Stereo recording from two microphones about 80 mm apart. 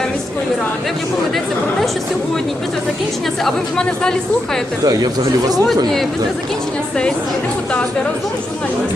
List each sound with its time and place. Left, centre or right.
3.4 s speech: centre
4.9 s speech: right